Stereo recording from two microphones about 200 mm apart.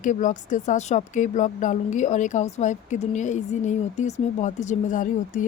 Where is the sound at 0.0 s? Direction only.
40° left (ahead or behind).